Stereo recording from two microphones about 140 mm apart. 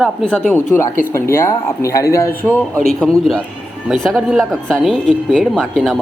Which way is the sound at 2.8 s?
5° left (ahead or behind).